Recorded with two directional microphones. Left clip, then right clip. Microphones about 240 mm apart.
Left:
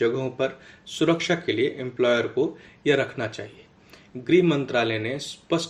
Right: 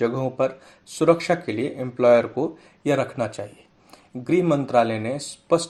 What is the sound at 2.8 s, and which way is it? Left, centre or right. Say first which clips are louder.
Speech: even; right.